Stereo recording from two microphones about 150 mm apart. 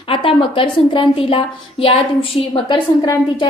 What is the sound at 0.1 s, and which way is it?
A woman's voice, 35° left (ahead or behind).